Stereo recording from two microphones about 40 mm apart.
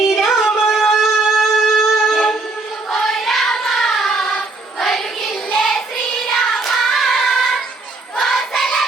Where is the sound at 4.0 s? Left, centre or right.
Centre.